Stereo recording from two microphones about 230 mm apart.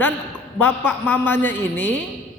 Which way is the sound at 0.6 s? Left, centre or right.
Centre.